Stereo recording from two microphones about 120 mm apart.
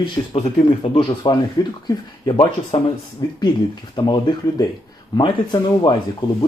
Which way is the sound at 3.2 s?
35° left (ahead or behind).